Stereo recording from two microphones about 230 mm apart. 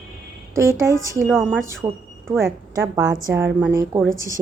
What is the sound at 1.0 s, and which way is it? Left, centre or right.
A woman's voice, centre.